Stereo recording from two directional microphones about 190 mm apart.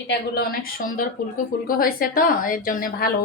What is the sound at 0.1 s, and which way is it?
A woman's voice, 50° left (ahead or behind).